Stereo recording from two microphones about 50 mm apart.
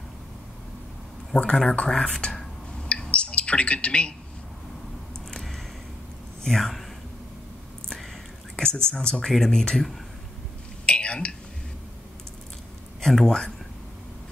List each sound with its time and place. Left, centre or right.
1.3 s speech: centre
2.9 s a sound: left
6.4 s speech: centre
8.5 s speech: centre
9.1 s speech: centre
10.9 s a sound: left
13.0 s speech: centre